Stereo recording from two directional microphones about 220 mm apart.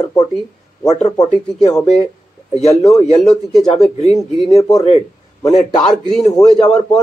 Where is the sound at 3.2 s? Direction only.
Centre (ahead or behind).